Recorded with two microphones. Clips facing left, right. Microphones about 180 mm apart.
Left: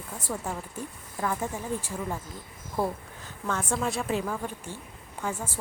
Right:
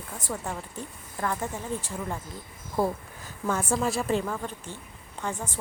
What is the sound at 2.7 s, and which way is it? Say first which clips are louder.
A woman's voice: right 2 dB; 10° right (ahead or behind).